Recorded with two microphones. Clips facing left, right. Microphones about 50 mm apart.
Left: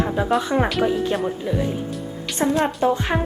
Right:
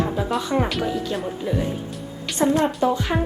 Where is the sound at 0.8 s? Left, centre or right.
Left.